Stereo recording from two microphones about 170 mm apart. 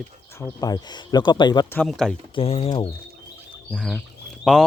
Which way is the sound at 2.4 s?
35° left (ahead or behind).